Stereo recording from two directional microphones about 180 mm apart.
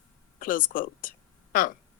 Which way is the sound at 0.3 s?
50° left (ahead or behind).